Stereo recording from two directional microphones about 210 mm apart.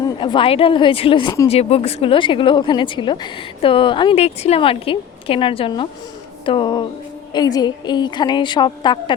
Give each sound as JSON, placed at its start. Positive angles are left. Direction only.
{"t": 0.0, "sound": "speech", "side_deg": 20}
{"t": 6.4, "sound": "music", "side_deg": 25}
{"t": 7.3, "sound": "speech", "side_deg": 20}